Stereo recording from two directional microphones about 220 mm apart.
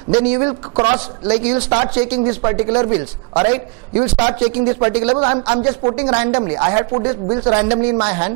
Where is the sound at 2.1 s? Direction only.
25° right (ahead or behind).